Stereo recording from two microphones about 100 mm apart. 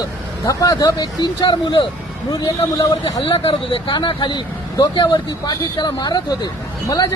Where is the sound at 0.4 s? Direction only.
35° left (ahead or behind).